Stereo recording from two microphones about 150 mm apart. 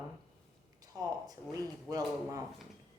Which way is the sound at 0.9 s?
25° right (ahead or behind).